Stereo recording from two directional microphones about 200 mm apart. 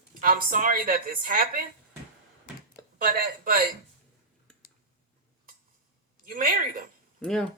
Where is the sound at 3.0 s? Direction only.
45° right (ahead or behind).